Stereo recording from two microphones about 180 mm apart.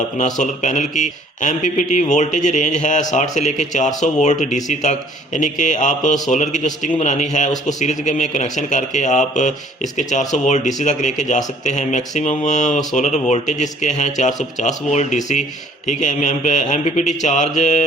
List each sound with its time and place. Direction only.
0.2 s speech: 45° left (ahead or behind)